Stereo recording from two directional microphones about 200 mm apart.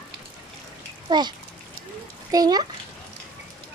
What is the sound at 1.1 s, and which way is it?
A child's voice, 20° right (ahead or behind).